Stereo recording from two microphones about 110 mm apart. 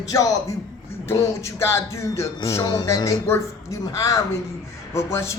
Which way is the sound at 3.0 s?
25° left (ahead or behind).